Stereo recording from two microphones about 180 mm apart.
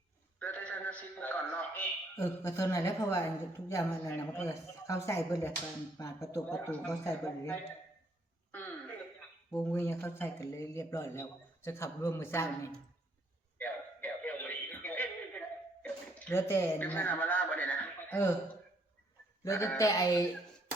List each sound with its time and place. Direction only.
0.3 s a man's voice: 5° left (ahead or behind)
6.5 s speech: 5° left (ahead or behind)
7.0 s a man's voice: 15° left (ahead or behind)
9.5 s a man's voice: 5° left (ahead or behind)
13.6 s a sound: 10° left (ahead or behind)
19.5 s speech: 15° left (ahead or behind)